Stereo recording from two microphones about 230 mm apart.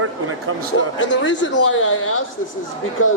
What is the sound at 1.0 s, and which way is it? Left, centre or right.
Speech, left.